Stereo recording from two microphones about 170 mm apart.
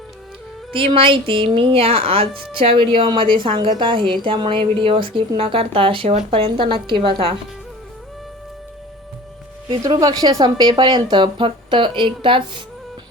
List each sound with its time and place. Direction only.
0.7 s a woman's voice: 30° right (ahead or behind)
9.6 s a woman's voice: 25° right (ahead or behind)